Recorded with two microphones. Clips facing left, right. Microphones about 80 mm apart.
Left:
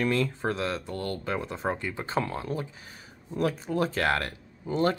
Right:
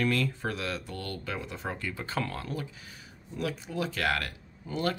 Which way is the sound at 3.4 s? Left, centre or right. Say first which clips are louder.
Left 6 dB; left.